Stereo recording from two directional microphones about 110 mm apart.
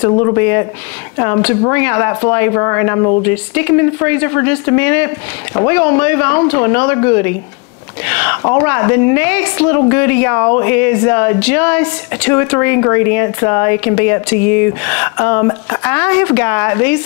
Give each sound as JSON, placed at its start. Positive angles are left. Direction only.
{"t": 0.1, "sound": "a woman's voice", "side_deg": 30}